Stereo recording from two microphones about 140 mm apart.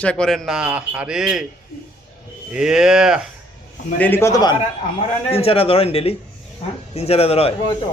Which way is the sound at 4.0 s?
15° left (ahead or behind).